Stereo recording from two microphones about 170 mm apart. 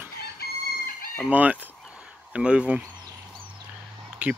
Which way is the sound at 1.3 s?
10° right (ahead or behind).